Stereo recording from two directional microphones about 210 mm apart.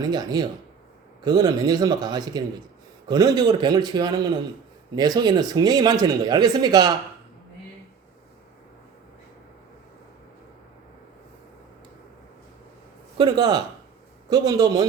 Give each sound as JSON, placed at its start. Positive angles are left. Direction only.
{"t": 0.0, "sound": "speech", "side_deg": -20}
{"t": 13.1, "sound": "a man's voice", "side_deg": -20}